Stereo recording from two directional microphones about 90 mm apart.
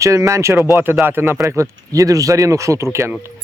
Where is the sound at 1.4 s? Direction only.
35° right (ahead or behind).